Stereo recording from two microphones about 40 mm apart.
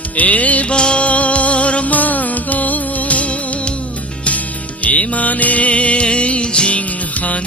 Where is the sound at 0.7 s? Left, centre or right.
Left.